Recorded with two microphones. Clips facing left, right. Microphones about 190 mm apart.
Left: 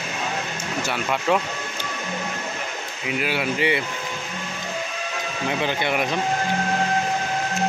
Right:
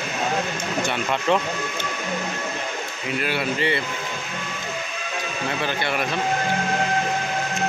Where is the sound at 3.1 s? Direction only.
10° left (ahead or behind).